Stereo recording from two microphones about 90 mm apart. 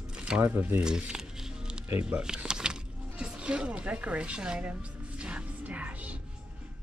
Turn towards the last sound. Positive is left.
turn(degrees=-15)  # may be behind; listen again after turning